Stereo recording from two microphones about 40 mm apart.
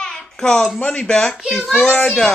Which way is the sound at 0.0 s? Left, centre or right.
Centre.